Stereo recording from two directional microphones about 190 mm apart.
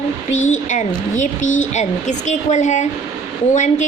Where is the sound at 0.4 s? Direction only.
40° left (ahead or behind).